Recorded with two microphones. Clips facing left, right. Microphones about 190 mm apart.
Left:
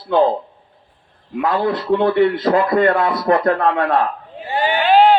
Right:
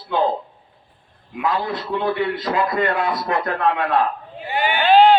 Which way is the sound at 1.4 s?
55° left (ahead or behind).